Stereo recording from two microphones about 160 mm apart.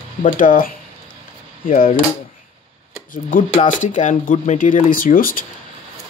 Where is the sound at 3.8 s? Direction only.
50° left (ahead or behind).